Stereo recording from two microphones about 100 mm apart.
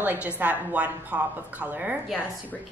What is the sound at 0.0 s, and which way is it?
A woman's voice, 15° right (ahead or behind).